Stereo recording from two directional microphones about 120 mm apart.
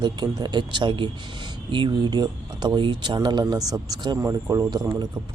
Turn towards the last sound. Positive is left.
turn(degrees=-35)  # may be behind; listen again after turning